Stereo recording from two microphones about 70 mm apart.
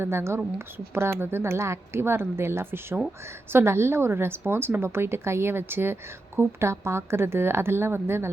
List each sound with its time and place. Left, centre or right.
0.0 s a woman's voice: right